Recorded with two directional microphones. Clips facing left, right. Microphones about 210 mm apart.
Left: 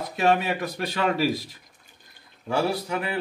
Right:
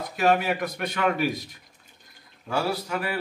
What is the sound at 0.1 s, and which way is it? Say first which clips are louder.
A man's voice: even; 25° left (ahead or behind).